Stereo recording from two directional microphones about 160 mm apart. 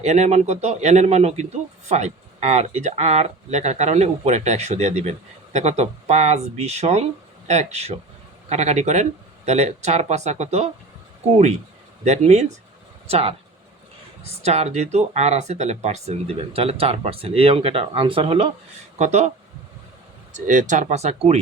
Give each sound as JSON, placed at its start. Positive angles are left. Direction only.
{"t": 0.0, "sound": "speech", "side_deg": -45}
{"t": 12.0, "sound": "speech", "side_deg": -45}
{"t": 20.5, "sound": "speech", "side_deg": -50}